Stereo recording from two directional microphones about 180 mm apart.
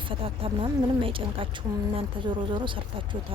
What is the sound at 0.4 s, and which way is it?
Speech, 30° right (ahead or behind).